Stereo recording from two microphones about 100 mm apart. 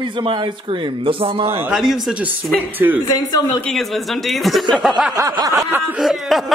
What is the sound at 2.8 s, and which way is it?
Speech, 25° right (ahead or behind).